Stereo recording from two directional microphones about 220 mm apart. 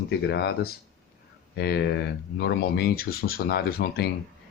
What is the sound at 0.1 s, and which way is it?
Speech, 50° left (ahead or behind).